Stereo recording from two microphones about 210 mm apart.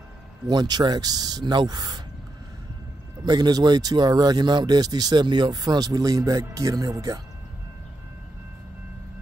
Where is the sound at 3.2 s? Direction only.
20° right (ahead or behind).